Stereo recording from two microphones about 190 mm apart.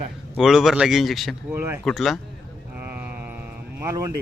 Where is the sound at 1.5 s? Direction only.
10° right (ahead or behind).